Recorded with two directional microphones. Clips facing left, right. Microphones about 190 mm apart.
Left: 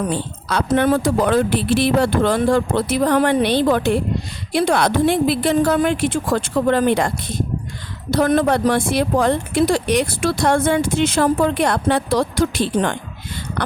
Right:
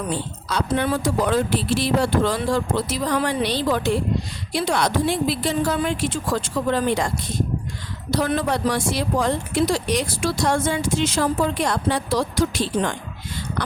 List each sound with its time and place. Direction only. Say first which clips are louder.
0.4 s speech: left 6 dB; 55° left (ahead or behind)
8.1 s speech: left 6 dB; 55° left (ahead or behind)